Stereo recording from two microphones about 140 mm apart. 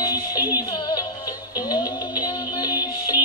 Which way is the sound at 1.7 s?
30° left (ahead or behind).